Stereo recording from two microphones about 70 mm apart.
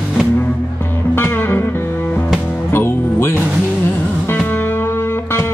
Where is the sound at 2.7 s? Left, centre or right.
Left.